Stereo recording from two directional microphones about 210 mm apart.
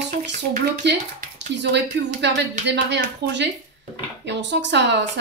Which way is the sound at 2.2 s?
55° right (ahead or behind).